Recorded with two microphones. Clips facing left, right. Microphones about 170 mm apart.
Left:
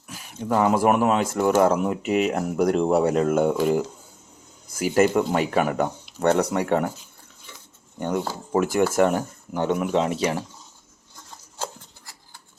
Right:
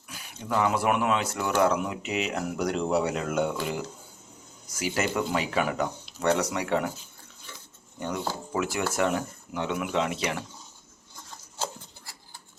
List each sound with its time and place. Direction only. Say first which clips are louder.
0.1 s speech: left 5 dB; 45° left (ahead or behind)
7.9 s speech: left 5 dB; 50° left (ahead or behind)